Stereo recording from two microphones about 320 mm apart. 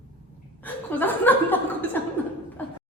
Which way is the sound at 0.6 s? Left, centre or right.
Centre.